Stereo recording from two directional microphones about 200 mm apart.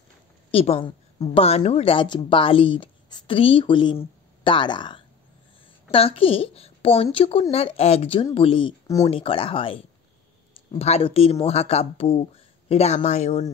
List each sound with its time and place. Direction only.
0.5 s a woman's voice: 30° left (ahead or behind)